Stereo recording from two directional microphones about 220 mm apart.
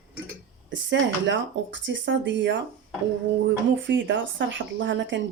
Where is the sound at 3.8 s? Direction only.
55° right (ahead or behind).